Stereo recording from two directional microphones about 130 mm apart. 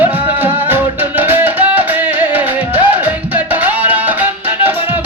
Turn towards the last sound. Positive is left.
turn(degrees=-15)  # may be behind; listen again after turning